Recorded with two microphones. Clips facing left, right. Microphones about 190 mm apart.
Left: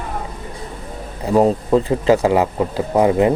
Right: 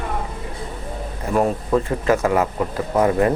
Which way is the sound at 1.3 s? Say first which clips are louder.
Left 5 dB; 25° left (ahead or behind).